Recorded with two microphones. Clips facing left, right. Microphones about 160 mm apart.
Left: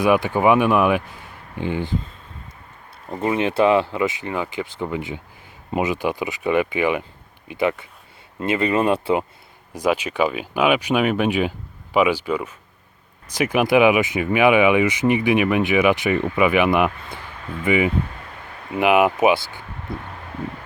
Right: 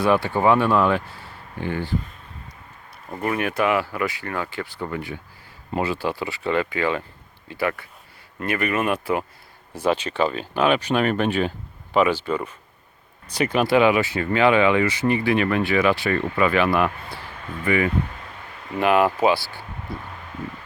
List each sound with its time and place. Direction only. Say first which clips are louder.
0.0 s speech: left 2 dB; 15° left (ahead or behind)
3.1 s speech: left 3 dB; 20° left (ahead or behind)
9.7 s speech: left 1 dB; 10° left (ahead or behind)